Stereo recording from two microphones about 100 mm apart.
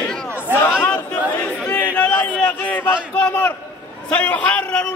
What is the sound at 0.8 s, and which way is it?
Chatter, 15° left (ahead or behind).